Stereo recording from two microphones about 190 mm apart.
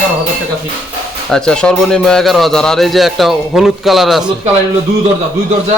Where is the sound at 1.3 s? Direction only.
5° left (ahead or behind).